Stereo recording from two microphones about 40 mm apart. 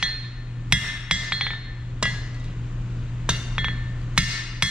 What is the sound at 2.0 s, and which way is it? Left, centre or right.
Hammer, right.